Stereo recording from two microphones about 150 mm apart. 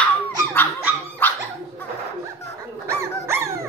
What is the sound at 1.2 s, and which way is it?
Dog, 15° left (ahead or behind).